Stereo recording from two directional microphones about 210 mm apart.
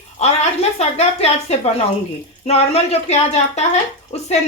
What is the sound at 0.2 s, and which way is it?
A woman's voice, 30° left (ahead or behind).